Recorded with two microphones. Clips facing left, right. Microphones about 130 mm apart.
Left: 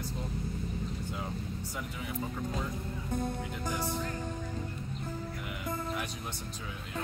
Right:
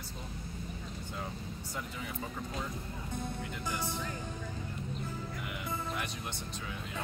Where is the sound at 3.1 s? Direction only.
45° left (ahead or behind).